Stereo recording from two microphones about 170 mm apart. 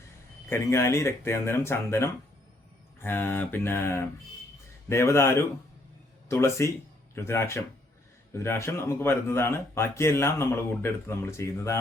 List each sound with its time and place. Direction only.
0.5 s speech: 15° left (ahead or behind)